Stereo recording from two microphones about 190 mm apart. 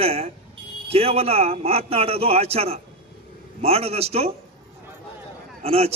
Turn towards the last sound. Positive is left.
turn(degrees=-30)  # may be behind; listen again after turning